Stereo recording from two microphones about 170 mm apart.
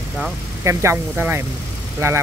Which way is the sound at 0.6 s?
15° right (ahead or behind).